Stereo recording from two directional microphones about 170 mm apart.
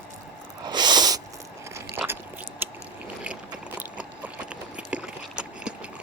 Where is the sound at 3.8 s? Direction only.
10° right (ahead or behind).